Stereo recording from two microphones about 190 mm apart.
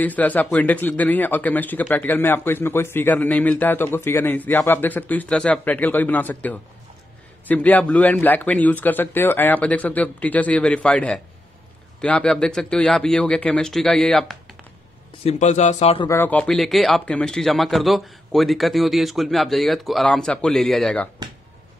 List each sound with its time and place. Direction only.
0.0 s speech: 10° left (ahead or behind)
15.2 s a man's voice: 40° left (ahead or behind)
16.1 s speech: 10° left (ahead or behind)